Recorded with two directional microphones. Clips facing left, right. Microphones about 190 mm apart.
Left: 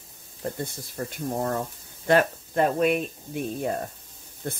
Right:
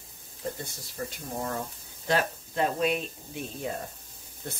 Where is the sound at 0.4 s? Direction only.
50° left (ahead or behind).